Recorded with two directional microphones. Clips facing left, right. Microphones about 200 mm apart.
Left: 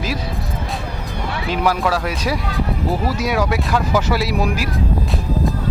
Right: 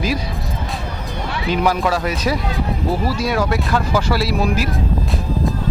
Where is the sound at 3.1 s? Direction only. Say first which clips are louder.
Even; 15° left (ahead or behind).